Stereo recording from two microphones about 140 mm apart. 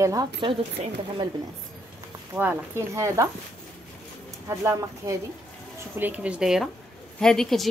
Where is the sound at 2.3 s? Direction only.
15° right (ahead or behind).